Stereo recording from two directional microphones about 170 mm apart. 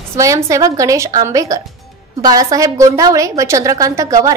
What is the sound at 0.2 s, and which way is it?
A woman's voice, 20° right (ahead or behind).